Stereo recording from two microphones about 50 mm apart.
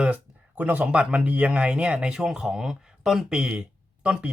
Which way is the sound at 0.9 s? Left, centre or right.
Right.